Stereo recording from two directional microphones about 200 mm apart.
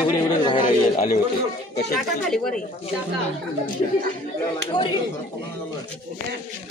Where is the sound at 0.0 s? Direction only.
25° left (ahead or behind).